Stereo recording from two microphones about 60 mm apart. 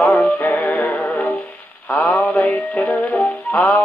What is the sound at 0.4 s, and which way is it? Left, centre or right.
Music, left.